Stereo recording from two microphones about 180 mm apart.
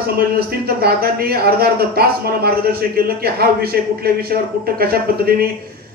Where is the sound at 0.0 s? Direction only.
60° right (ahead or behind).